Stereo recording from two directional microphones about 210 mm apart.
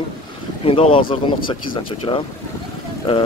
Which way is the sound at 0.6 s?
25° left (ahead or behind).